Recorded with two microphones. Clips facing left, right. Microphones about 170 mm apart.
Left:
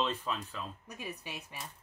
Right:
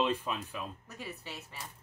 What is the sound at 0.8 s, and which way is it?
Speech, 15° left (ahead or behind).